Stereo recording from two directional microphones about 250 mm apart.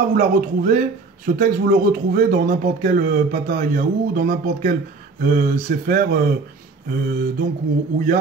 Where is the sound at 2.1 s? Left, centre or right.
Right.